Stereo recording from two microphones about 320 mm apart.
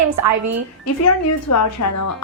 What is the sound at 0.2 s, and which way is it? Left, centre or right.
Speech, right.